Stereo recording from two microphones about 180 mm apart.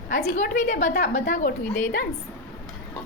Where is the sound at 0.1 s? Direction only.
50° left (ahead or behind).